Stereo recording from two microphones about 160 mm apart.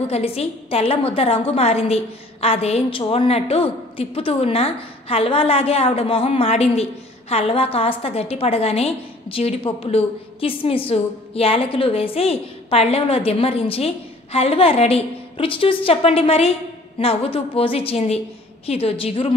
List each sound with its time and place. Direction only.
0.1 s a woman's voice: 40° left (ahead or behind)